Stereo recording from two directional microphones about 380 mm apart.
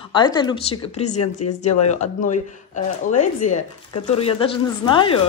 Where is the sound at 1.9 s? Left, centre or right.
Centre.